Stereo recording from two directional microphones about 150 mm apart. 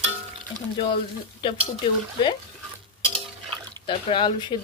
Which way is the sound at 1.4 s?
35° left (ahead or behind).